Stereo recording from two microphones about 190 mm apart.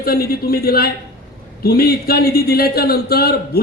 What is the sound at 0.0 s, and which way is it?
A man's voice, 55° left (ahead or behind).